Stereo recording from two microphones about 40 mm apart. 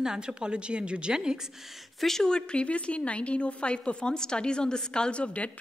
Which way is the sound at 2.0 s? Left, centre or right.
Centre.